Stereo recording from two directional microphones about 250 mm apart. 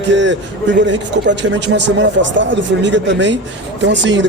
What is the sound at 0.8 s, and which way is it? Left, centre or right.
Speech, right.